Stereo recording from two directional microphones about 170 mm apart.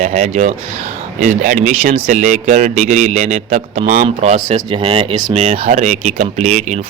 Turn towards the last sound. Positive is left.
turn(degrees=-45)  # may be behind; listen again after turning